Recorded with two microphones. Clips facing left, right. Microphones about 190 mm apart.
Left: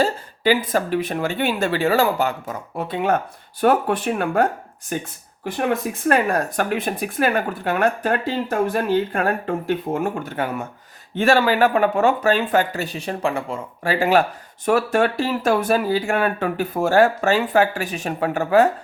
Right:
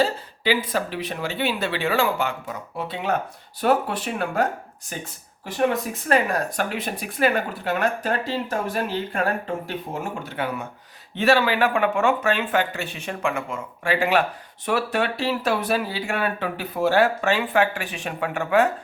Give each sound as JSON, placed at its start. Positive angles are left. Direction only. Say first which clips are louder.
{"t": 0.0, "sound": "speech", "louder": "left 3 dB", "side_deg": 45}
{"t": 6.1, "sound": "speech", "louder": "left 3 dB", "side_deg": 50}